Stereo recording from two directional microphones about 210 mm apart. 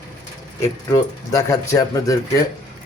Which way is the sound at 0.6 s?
15° left (ahead or behind).